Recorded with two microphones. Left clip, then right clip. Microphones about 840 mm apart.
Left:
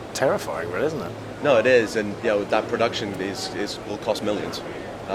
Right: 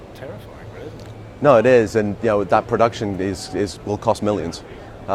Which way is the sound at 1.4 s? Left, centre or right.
Right.